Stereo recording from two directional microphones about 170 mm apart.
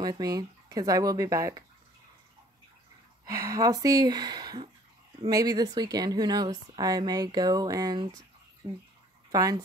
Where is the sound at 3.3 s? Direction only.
20° right (ahead or behind).